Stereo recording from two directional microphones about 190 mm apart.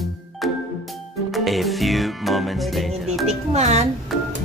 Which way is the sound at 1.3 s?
Centre (ahead or behind).